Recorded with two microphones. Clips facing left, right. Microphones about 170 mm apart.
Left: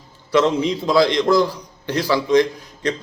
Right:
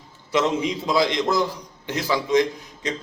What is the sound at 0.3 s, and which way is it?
A man's voice, 15° right (ahead or behind).